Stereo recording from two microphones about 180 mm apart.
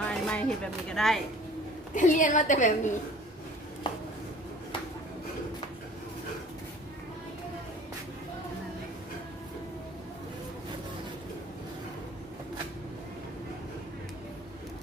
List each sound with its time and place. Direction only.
0.0 s speech: 5° left (ahead or behind)
2.0 s a woman's voice: 45° left (ahead or behind)
3.9 s a sound: 25° left (ahead or behind)